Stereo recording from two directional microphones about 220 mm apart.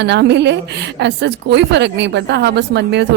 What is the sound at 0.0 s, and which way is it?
A woman's voice, 50° right (ahead or behind).